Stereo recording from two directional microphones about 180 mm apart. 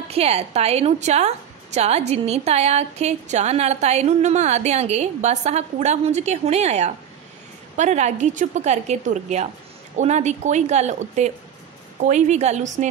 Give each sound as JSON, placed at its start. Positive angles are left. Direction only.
{"t": 0.1, "sound": "a woman's voice", "side_deg": -35}